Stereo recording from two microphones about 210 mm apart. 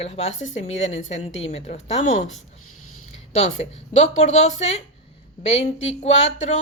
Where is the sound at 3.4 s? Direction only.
30° left (ahead or behind).